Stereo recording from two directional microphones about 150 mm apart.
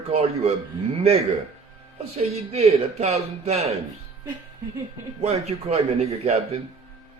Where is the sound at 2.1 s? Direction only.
45° right (ahead or behind).